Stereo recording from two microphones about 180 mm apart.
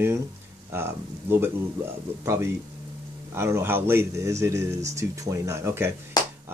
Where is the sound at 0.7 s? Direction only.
15° right (ahead or behind).